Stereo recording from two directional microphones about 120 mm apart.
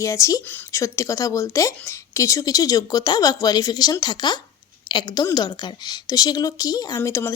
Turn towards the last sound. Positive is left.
turn(degrees=25)  # may be behind; listen again after turning